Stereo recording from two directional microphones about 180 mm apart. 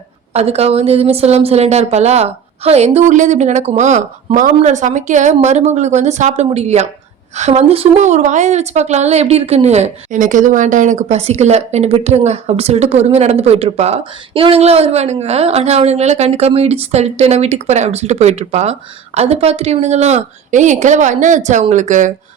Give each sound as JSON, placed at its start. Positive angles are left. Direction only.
{"t": 0.3, "sound": "a woman's voice", "side_deg": -35}